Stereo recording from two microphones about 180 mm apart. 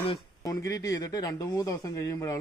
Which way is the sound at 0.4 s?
20° left (ahead or behind).